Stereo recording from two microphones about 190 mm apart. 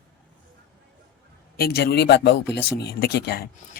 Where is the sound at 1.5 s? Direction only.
55° left (ahead or behind).